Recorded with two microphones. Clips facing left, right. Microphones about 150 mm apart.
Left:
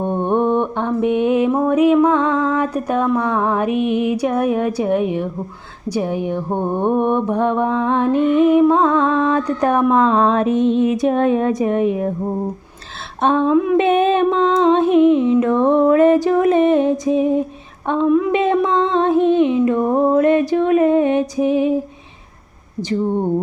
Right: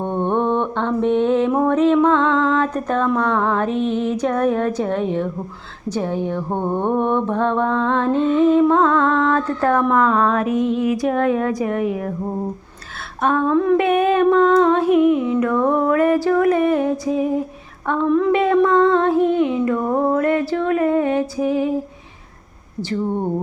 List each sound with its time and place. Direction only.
0.0 s mantra: 10° left (ahead or behind)
8.7 s music: 15° left (ahead or behind)
9.9 s humming: 25° left (ahead or behind)
13.2 s humming: 25° left (ahead or behind)
13.5 s mantra: 10° left (ahead or behind)
13.7 s humming: 25° left (ahead or behind)